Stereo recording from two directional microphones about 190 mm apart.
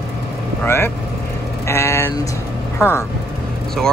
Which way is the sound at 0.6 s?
10° left (ahead or behind).